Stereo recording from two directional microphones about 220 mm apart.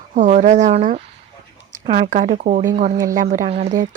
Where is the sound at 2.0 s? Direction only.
35° right (ahead or behind).